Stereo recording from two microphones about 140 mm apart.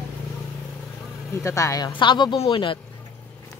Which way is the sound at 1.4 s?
20° left (ahead or behind).